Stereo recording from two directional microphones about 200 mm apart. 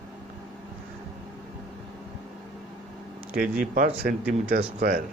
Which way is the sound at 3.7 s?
45° right (ahead or behind).